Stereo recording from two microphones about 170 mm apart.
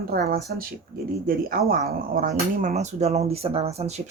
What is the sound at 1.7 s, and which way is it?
Speech, 65° right (ahead or behind).